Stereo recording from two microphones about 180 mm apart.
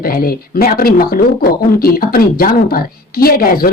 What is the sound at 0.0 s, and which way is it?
Speech, 55° left (ahead or behind).